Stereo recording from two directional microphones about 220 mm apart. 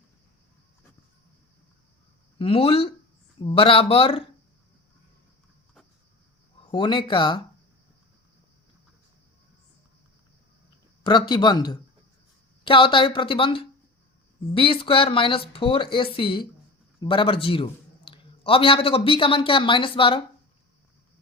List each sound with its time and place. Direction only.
2.4 s speech: 25° left (ahead or behind)
6.7 s speech: 20° left (ahead or behind)
11.0 s a man's voice: 20° left (ahead or behind)